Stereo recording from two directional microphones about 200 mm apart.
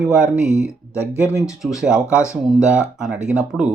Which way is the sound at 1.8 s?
5° right (ahead or behind).